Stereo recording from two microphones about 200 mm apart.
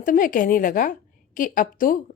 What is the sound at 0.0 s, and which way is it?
A woman's voice, 40° left (ahead or behind).